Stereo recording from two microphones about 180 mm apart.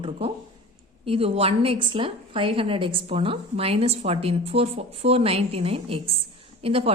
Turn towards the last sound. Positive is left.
turn(degrees=-30)  # may be behind; listen again after turning